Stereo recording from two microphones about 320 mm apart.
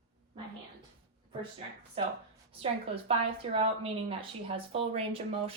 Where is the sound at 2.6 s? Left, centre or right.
Centre.